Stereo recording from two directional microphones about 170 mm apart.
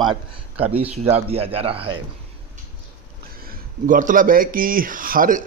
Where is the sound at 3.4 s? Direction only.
55° right (ahead or behind).